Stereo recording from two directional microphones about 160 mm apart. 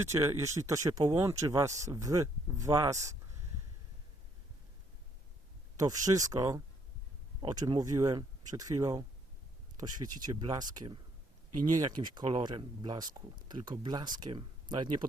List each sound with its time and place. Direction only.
0.0 s speech: 15° right (ahead or behind)
5.7 s speech: 25° right (ahead or behind)
10.2 s speech: 25° right (ahead or behind)